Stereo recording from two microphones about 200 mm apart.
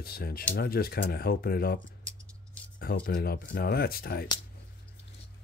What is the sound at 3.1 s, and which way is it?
Speech, 45° left (ahead or behind).